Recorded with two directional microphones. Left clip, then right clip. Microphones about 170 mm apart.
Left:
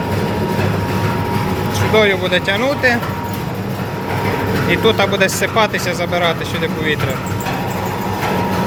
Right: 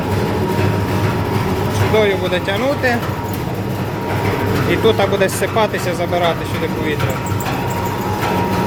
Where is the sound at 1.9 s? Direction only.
5° right (ahead or behind).